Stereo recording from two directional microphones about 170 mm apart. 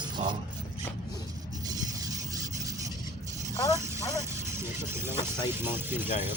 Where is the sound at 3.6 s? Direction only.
20° left (ahead or behind).